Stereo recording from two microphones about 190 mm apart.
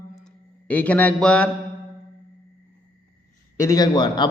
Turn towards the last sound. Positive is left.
turn(degrees=20)  # may be behind; listen again after turning